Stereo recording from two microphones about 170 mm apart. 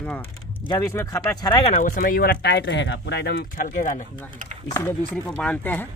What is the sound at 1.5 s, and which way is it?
Speech, 35° left (ahead or behind).